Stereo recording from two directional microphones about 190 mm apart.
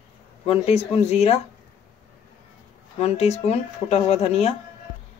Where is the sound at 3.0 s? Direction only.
35° left (ahead or behind).